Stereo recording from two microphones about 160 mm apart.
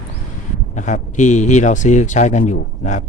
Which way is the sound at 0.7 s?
50° left (ahead or behind).